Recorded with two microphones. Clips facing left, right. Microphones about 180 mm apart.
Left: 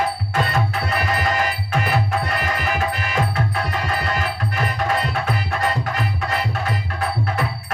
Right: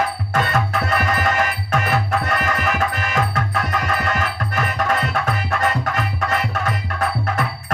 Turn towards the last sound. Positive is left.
turn(degrees=35)  # may be behind; listen again after turning